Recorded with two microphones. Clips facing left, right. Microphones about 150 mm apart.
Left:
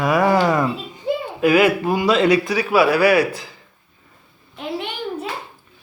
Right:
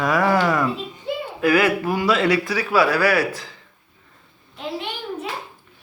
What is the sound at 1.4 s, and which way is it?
Speech, 15° left (ahead or behind).